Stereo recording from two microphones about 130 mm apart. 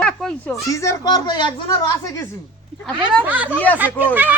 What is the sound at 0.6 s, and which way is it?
Speech, 25° left (ahead or behind).